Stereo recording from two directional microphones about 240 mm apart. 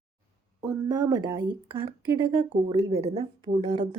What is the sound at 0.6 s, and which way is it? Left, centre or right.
Speech, centre.